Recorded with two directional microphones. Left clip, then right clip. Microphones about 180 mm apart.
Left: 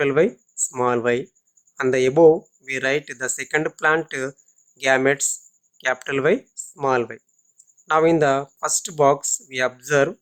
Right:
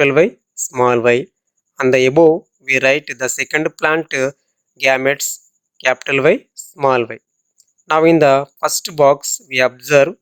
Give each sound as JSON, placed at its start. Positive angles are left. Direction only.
{"t": 0.0, "sound": "speech", "side_deg": -30}